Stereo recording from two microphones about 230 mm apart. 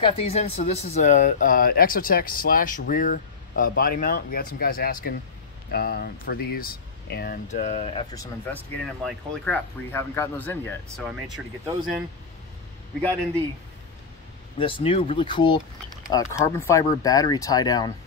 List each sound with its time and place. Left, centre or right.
0.0 s speech: left
8.5 s speech: centre
14.6 s speech: left